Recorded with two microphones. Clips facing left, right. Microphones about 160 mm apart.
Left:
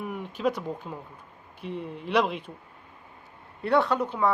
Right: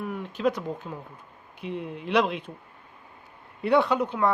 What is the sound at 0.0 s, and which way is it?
A woman's voice, 5° left (ahead or behind).